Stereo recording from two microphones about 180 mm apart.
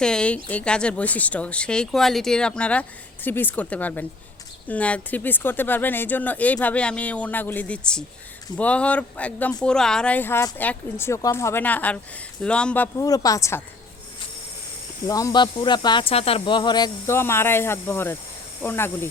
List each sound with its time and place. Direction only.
0.0 s a woman's voice: 5° left (ahead or behind)
15.0 s speech: 20° left (ahead or behind)